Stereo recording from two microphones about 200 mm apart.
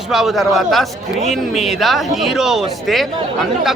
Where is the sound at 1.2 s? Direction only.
35° left (ahead or behind).